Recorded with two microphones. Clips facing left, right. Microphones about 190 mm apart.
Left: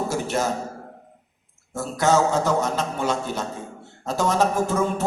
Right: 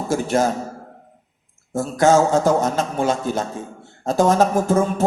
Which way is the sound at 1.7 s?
50° right (ahead or behind).